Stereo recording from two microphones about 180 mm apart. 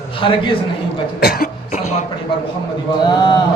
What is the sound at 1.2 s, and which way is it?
Cough, 60° left (ahead or behind).